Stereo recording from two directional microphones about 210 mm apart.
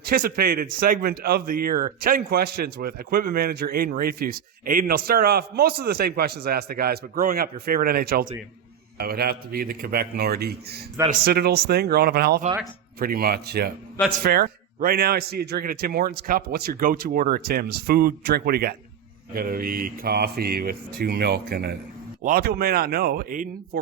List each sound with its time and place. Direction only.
0.0 s a man's voice: 45° right (ahead or behind)